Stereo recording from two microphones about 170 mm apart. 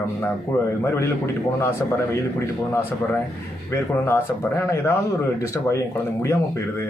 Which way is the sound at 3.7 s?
15° left (ahead or behind).